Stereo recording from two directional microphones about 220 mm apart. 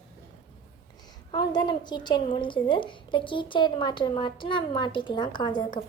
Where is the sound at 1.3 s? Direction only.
20° left (ahead or behind).